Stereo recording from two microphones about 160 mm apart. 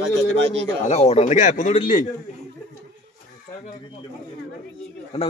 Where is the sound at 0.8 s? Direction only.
40° left (ahead or behind).